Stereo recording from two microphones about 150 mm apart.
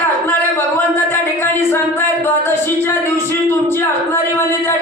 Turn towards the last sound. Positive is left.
turn(degrees=15)  # may be behind; listen again after turning